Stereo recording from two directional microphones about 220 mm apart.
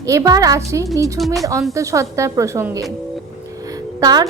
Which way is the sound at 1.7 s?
15° right (ahead or behind).